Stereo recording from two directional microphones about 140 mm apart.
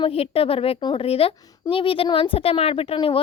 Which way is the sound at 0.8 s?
30° left (ahead or behind).